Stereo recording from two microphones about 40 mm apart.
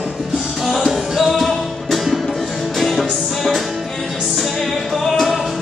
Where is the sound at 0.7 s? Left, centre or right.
Centre.